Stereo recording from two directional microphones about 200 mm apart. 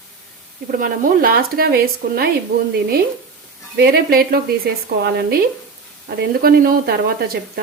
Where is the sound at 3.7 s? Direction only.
55° right (ahead or behind).